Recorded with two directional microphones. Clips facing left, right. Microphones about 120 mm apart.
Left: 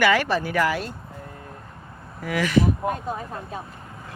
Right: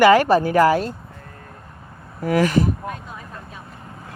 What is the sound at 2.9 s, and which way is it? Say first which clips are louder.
Speech: left 6 dB; 40° left (ahead or behind).